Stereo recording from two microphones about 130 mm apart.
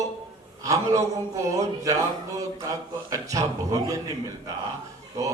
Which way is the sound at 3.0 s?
25° right (ahead or behind).